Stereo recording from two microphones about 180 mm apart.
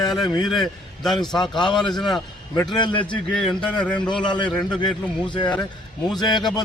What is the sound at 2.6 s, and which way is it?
Speech, 25° left (ahead or behind).